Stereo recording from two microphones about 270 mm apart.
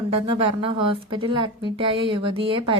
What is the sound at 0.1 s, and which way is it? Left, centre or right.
Speech, centre.